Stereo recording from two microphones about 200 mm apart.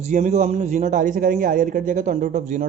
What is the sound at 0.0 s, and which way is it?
Speech, 35° right (ahead or behind).